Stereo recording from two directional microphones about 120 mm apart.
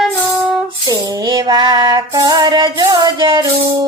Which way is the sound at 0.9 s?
35° right (ahead or behind).